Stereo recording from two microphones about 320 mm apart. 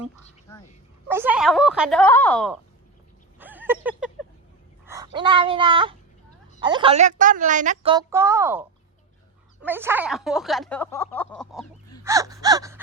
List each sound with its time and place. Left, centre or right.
0.5 s dog: centre
1.1 s speech: centre
3.3 s a sound: centre
5.1 s a woman's voice: centre
9.6 s speech: centre
12.0 s a woman's voice: centre